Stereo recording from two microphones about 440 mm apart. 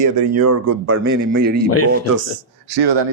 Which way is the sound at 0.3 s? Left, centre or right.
Right.